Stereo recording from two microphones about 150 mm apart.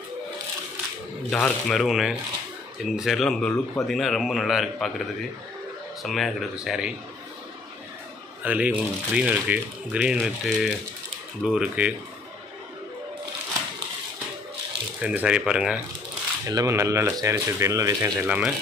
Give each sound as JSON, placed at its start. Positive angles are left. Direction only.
{"t": 1.3, "sound": "a man's voice", "side_deg": 5}
{"t": 6.0, "sound": "a man's voice", "side_deg": 0}
{"t": 8.4, "sound": "a man's voice", "side_deg": -10}
{"t": 15.0, "sound": "speech", "side_deg": -10}
{"t": 16.4, "sound": "speech", "side_deg": -20}
{"t": 18.2, "sound": "speech", "side_deg": -5}